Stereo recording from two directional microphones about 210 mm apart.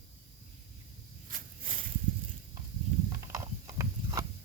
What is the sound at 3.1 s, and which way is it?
Mechanisms, 15° right (ahead or behind).